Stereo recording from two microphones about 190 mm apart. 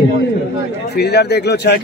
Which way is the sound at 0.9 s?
60° left (ahead or behind).